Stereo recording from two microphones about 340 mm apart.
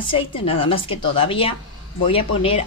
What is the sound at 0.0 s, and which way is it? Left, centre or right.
A woman's voice, centre.